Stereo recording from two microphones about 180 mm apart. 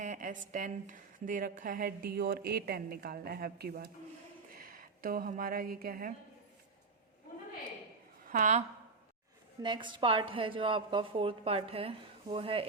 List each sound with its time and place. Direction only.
0.0 s a woman's voice: 45° right (ahead or behind)
8.3 s a woman's voice: 40° right (ahead or behind)
9.6 s a woman's voice: 25° right (ahead or behind)